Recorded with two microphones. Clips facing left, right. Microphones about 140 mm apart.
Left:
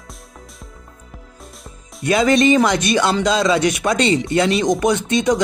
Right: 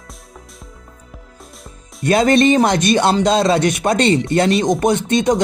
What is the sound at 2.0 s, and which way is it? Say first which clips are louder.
Speech: right 2 dB; 55° right (ahead or behind).